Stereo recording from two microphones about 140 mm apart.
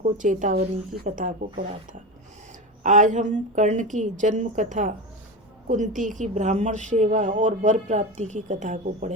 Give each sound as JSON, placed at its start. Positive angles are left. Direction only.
{"t": 0.0, "sound": "a woman's voice", "side_deg": -65}
{"t": 2.8, "sound": "a woman's voice", "side_deg": -65}